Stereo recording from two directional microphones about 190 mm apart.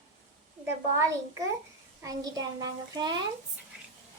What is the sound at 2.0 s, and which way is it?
A child's voice, 20° right (ahead or behind).